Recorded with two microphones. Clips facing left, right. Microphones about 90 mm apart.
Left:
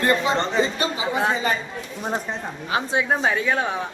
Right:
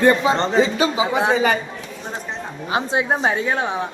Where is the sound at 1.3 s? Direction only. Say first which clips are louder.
Right 5 dB; 75° right (ahead or behind).